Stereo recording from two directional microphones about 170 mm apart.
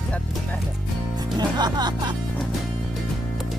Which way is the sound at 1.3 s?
25° right (ahead or behind).